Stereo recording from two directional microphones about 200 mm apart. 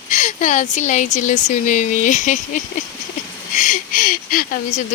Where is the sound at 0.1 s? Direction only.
40° left (ahead or behind).